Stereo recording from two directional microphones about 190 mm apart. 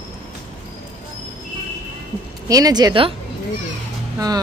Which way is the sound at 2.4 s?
20° right (ahead or behind).